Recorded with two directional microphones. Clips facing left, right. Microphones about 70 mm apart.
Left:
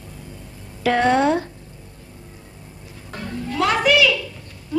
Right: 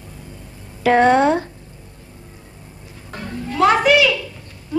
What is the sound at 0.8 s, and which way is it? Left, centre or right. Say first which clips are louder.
Speech: right 4 dB; right.